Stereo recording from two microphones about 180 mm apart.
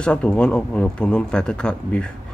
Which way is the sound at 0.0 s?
5° left (ahead or behind).